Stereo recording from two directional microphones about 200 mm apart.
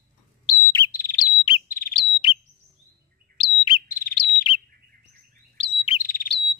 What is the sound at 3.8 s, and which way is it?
Bird, 45° left (ahead or behind).